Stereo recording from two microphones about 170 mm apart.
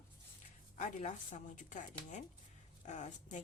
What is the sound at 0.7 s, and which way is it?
Speech, 45° left (ahead or behind).